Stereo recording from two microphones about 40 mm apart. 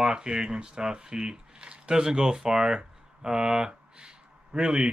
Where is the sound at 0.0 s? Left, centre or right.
Centre.